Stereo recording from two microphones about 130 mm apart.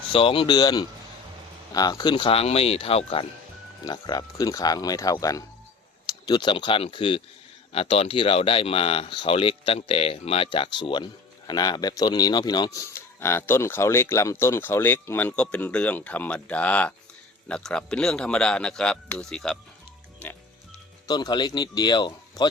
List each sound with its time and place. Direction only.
0.1 s speech: 45° left (ahead or behind)
3.8 s speech: 30° left (ahead or behind)
13.1 s speech: 20° left (ahead or behind)
21.1 s speech: 35° left (ahead or behind)